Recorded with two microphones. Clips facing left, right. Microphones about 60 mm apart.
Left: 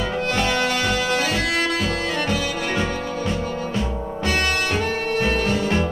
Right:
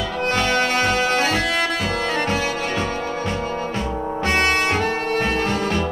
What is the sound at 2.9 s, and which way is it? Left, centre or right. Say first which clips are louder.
Music: right 1 dB; right.